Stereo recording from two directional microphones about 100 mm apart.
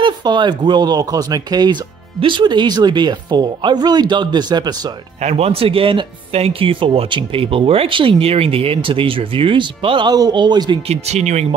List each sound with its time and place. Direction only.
0.0 s speech: 50° right (ahead or behind)
2.1 s speech: 55° right (ahead or behind)
5.3 s speech: 85° right; by 10.1 s 60° right (ahead or behind)
10.1 s speech: 45° right (ahead or behind)
10.9 s speech: 90° right